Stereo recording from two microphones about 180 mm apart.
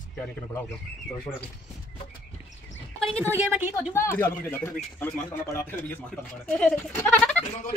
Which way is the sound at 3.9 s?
10° left (ahead or behind).